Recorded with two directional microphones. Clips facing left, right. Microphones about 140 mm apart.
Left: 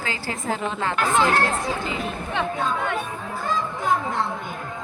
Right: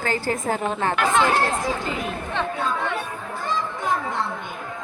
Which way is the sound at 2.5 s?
5° left (ahead or behind).